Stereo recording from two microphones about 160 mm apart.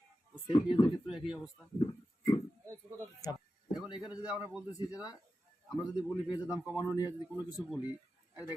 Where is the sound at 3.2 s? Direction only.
25° left (ahead or behind).